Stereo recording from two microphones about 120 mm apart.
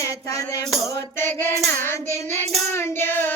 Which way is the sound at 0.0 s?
30° left (ahead or behind).